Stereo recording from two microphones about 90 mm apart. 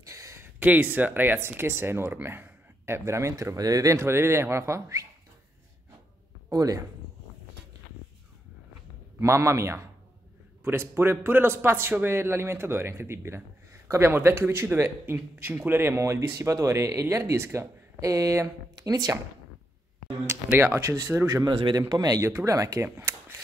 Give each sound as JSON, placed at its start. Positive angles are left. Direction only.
{"t": 0.0, "sound": "a sound", "side_deg": -35}
{"t": 0.6, "sound": "speech", "side_deg": -20}
{"t": 6.5, "sound": "speech", "side_deg": -40}
{"t": 9.2, "sound": "speech", "side_deg": -30}
{"t": 20.2, "sound": "speech", "side_deg": -25}
{"t": 21.5, "sound": "a man's voice", "side_deg": -65}
{"t": 21.7, "sound": "speech", "side_deg": -45}
{"t": 22.2, "sound": "speech", "side_deg": -35}
{"t": 22.8, "sound": "a sound", "side_deg": -30}